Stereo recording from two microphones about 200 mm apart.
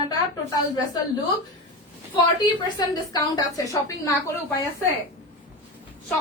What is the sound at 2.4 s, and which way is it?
A woman's voice, 20° left (ahead or behind).